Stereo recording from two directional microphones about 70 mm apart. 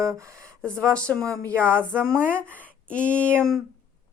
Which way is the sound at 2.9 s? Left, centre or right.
Centre.